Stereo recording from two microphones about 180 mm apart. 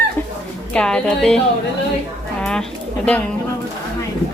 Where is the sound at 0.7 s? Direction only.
5° left (ahead or behind).